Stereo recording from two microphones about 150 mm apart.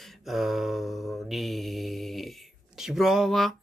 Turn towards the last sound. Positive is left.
turn(degrees=0)  # may be behind; listen again after turning